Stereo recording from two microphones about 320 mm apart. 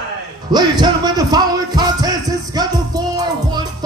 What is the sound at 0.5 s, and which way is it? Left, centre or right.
Music, centre.